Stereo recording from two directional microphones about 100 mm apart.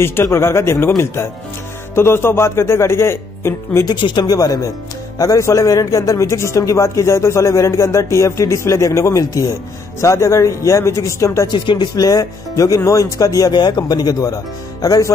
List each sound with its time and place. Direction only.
0.0 s a man's voice: 25° left (ahead or behind)
3.8 s a man's voice: 50° left (ahead or behind); by 11.4 s 30° left (ahead or behind)
11.4 s speech: 50° left (ahead or behind)
13.5 s speech: 45° left (ahead or behind)